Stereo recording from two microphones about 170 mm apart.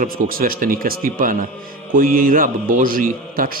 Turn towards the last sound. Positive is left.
turn(degrees=-55)  # may be behind; listen again after turning